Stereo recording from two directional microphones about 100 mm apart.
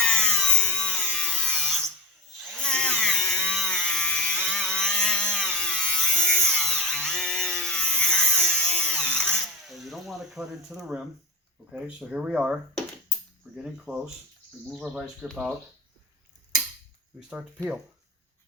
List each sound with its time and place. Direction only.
0.0 s tools: 10° left (ahead or behind)
2.4 s chainsaw: 5° left (ahead or behind)
9.6 s a sound: centre (ahead or behind)
11.7 s speech: 10° right (ahead or behind)
13.6 s speech: 5° right (ahead or behind)
17.2 s speech: 10° right (ahead or behind)